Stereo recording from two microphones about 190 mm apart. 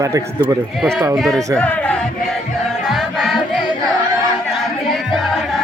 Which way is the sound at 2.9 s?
Centre (ahead or behind).